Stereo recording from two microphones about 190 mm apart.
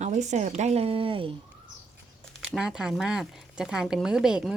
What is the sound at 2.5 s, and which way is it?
Speech, 5° right (ahead or behind).